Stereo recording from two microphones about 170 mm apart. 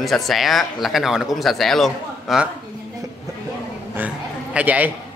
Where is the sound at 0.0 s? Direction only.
Centre (ahead or behind).